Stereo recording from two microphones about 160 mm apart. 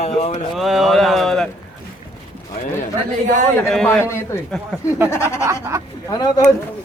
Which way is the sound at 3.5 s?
5° left (ahead or behind).